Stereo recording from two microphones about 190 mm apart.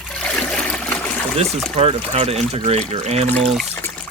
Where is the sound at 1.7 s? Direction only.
30° right (ahead or behind).